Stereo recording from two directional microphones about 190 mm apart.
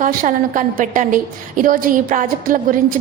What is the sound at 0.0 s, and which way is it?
A woman's voice, 45° right (ahead or behind).